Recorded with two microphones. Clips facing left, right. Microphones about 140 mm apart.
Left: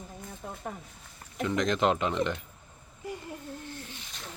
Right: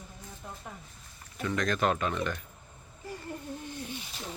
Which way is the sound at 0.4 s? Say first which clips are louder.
Left 4 dB; 55° left (ahead or behind).